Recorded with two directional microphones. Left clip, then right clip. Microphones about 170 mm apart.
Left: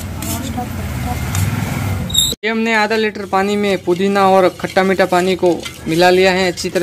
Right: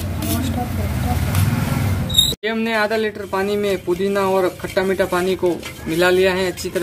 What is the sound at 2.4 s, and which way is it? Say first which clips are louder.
Speech: left 4 dB; 35° left (ahead or behind).